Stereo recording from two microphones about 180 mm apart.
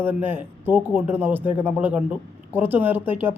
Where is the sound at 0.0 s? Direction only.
10° right (ahead or behind).